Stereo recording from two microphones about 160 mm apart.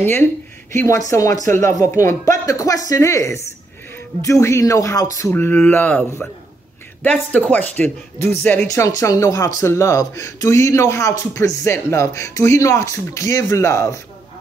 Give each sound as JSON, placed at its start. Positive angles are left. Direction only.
{"t": 0.0, "sound": "speech", "side_deg": 15}
{"t": 8.6, "sound": "speech", "side_deg": 20}